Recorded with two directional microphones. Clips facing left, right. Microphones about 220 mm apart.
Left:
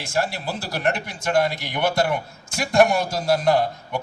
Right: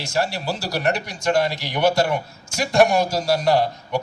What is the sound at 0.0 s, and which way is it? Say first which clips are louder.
A man's voice: right 1 dB; 50° left (ahead or behind).